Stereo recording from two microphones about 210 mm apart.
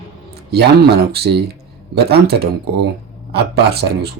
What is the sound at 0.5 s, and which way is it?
Speech, 50° right (ahead or behind).